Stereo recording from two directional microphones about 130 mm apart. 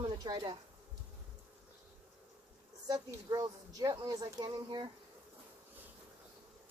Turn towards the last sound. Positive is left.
turn(degrees=-30)  # may be behind; listen again after turning